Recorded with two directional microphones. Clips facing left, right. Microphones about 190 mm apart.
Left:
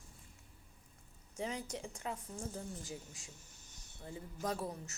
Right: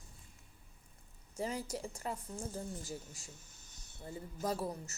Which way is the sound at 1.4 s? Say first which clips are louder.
Right 2 dB; centre (ahead or behind).